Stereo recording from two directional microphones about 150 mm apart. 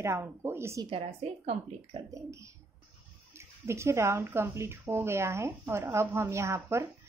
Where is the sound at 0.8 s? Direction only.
40° right (ahead or behind).